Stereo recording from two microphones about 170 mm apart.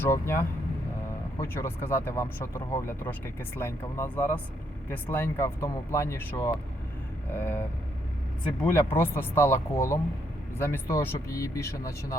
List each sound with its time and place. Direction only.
0.0 s speech: 10° left (ahead or behind)
8.6 s speech: 10° left (ahead or behind)